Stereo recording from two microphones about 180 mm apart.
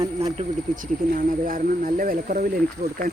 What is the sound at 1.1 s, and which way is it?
Speech, 50° right (ahead or behind).